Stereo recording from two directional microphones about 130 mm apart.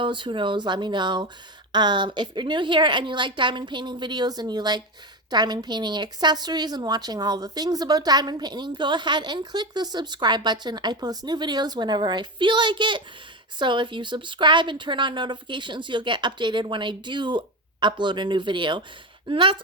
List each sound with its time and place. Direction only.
0.0 s a woman's voice: 40° right (ahead or behind)